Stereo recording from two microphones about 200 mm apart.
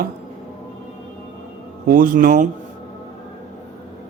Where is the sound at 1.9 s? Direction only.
45° right (ahead or behind).